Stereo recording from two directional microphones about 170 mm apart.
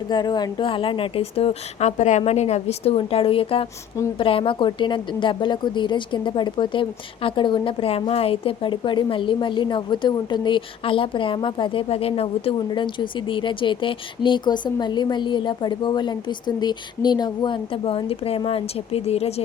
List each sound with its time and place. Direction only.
0.1 s a woman's voice: 25° left (ahead or behind)